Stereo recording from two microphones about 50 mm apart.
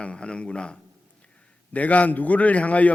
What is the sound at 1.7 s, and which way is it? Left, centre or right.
Speech, left.